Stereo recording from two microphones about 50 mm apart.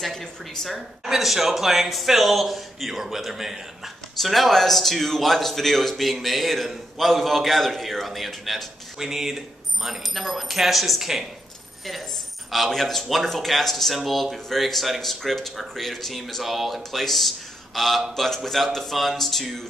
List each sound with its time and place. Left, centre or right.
0.0 s speech: centre
8.9 s speech: centre
12.4 s speech: centre